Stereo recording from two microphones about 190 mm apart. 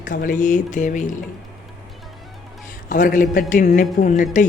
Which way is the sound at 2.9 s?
45° left (ahead or behind).